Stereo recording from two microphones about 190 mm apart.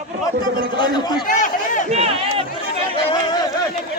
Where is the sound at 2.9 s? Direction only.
25° left (ahead or behind).